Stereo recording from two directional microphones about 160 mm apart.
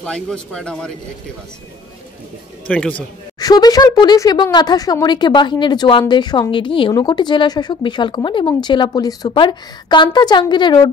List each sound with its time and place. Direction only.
0.0 s a man's voice: 5° left (ahead or behind)
2.7 s a man's voice: 10° left (ahead or behind)
3.3 s speech: 25° left (ahead or behind)